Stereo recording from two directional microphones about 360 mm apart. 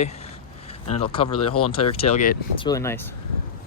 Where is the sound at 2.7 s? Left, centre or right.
Centre.